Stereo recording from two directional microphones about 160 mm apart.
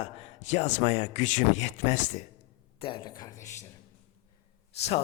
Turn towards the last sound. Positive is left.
turn(degrees=40)  # may be behind; listen again after turning